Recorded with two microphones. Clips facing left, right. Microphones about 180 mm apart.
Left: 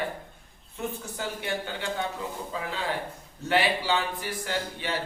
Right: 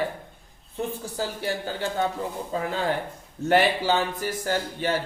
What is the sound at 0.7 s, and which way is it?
Speech, 35° right (ahead or behind).